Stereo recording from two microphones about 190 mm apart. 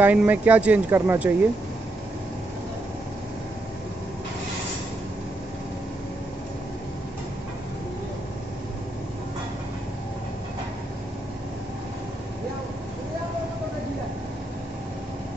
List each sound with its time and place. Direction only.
0.0 s speech: 10° right (ahead or behind)